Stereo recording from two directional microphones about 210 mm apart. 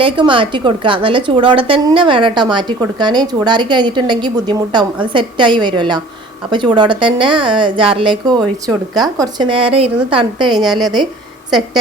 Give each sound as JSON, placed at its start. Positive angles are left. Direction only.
{"t": 0.0, "sound": "a woman's voice", "side_deg": -25}
{"t": 10.6, "sound": "a woman's voice", "side_deg": 0}